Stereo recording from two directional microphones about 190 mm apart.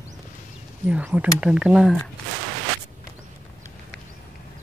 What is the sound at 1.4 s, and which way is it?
Speech, 5° right (ahead or behind).